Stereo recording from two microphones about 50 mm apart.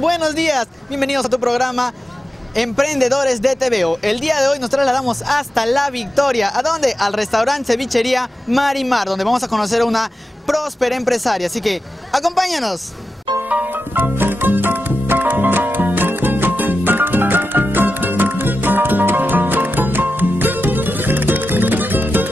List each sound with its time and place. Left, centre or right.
0.0 s a man's voice: centre
13.9 s music: right